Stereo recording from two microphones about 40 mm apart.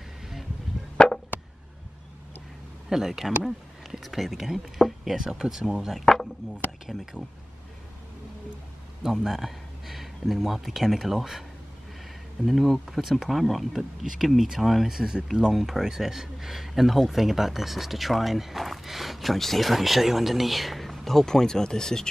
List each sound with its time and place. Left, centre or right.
0.9 s chop: left
2.9 s speech: centre
4.7 s a sound: centre
5.1 s speech: centre
5.9 s chop: centre
6.9 s speech: centre
9.2 s speech: centre
12.4 s speech: centre